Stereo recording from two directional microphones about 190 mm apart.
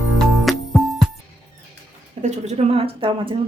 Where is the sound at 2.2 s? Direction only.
35° right (ahead or behind).